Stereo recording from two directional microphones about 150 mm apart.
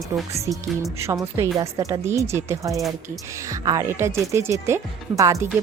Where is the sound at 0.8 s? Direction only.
20° right (ahead or behind).